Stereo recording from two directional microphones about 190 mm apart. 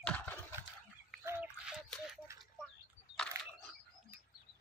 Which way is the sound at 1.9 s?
Centre (ahead or behind).